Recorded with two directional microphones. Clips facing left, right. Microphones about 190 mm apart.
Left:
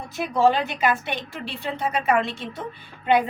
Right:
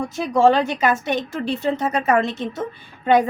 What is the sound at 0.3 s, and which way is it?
Speech, 45° right (ahead or behind).